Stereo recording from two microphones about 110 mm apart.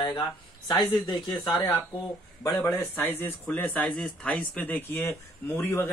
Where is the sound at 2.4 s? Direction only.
25° left (ahead or behind).